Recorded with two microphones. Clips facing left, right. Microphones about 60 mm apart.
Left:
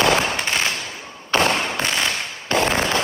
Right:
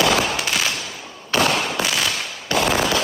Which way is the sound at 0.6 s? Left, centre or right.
Left.